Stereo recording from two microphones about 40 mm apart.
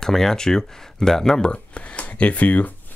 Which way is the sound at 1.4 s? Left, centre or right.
Left.